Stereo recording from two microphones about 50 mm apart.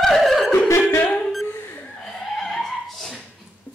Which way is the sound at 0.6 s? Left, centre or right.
Left.